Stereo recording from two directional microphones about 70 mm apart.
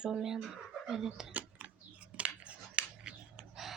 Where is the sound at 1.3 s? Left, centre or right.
Right.